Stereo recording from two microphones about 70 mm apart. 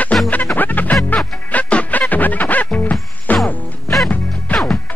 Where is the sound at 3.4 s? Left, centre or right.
Centre.